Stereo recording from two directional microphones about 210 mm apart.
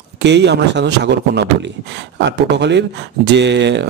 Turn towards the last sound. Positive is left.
turn(degrees=-55)  # may be behind; listen again after turning